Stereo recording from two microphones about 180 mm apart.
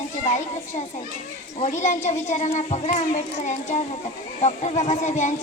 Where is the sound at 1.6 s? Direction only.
40° left (ahead or behind).